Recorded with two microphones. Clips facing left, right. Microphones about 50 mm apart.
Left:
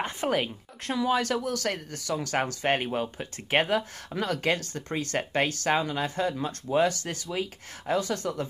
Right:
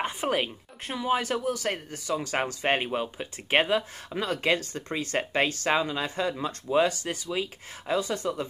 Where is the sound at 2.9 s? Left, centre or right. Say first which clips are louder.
Even; centre.